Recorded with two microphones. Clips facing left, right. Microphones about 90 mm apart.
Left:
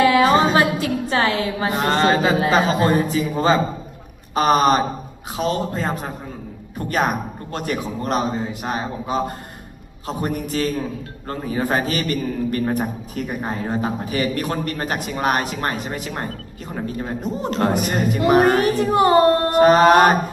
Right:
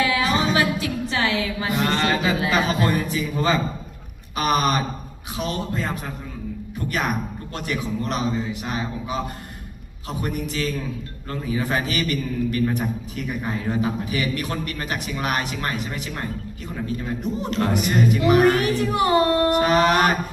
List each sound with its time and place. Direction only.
0.0 s a man's voice: 45° left (ahead or behind)